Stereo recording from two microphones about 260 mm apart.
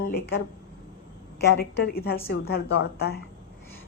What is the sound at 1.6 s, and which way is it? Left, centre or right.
A woman's voice, left.